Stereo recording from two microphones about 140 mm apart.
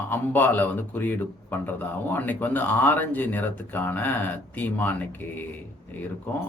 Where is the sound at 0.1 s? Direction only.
15° left (ahead or behind).